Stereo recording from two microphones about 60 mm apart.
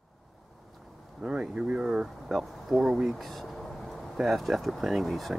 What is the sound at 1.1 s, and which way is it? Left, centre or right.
Speech, centre.